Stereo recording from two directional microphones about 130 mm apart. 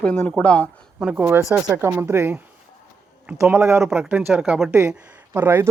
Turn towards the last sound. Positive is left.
turn(degrees=-15)  # may be behind; listen again after turning